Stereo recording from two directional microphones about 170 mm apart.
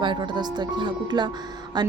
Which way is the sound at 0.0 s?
25° right (ahead or behind).